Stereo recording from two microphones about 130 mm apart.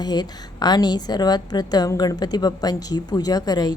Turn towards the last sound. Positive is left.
turn(degrees=30)  # may be behind; listen again after turning